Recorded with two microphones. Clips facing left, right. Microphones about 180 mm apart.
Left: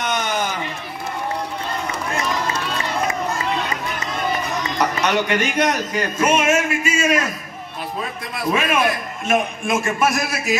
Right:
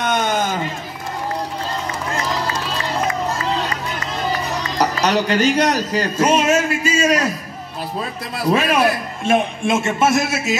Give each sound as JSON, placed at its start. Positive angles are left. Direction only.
{"t": 0.0, "sound": "a sound", "side_deg": -50}
{"t": 3.4, "sound": "run", "side_deg": -35}
{"t": 4.3, "sound": "speech", "side_deg": -35}
{"t": 8.4, "sound": "a man's voice", "side_deg": -35}